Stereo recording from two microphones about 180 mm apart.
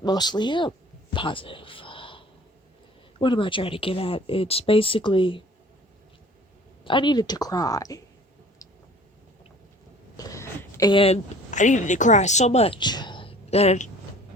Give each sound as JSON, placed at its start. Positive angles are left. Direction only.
{"t": 0.0, "sound": "a woman's voice", "side_deg": 20}
{"t": 1.1, "sound": "a sound", "side_deg": 30}
{"t": 3.2, "sound": "speech", "side_deg": 30}
{"t": 6.8, "sound": "a woman's voice", "side_deg": 25}
{"t": 10.2, "sound": "speech", "side_deg": 15}